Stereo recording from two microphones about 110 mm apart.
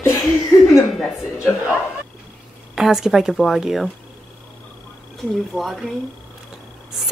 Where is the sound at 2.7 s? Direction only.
5° right (ahead or behind).